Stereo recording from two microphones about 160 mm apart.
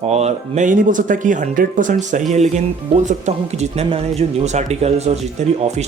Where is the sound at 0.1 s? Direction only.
45° right (ahead or behind).